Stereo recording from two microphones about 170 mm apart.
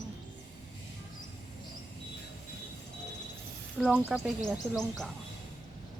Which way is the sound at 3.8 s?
5° right (ahead or behind).